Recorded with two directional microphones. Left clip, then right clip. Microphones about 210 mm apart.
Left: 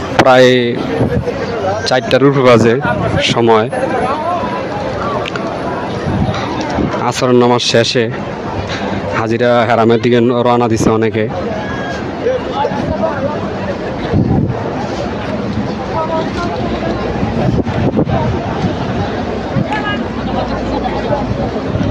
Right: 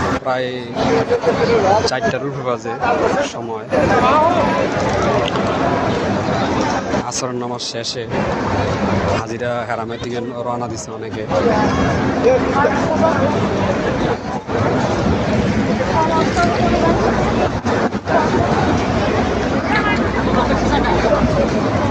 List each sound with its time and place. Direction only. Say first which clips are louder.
0.3 s speech: left 17 dB; 65° left (ahead or behind)
2.1 s speech: left 13 dB; 55° left (ahead or behind)
7.4 s speech: left 13 dB; 70° left (ahead or behind)
9.4 s speech: left 10 dB; 50° left (ahead or behind)